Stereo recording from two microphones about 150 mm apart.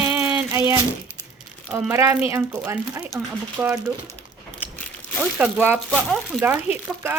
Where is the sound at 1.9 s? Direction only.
15° right (ahead or behind).